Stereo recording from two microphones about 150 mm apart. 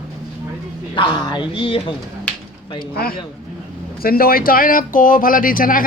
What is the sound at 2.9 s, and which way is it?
A man's voice, 80° left.